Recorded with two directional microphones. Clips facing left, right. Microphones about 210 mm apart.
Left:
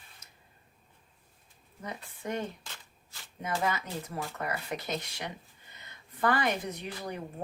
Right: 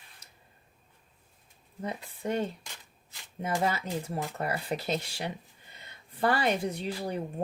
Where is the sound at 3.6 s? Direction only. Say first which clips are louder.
Right 2 dB; 30° right (ahead or behind).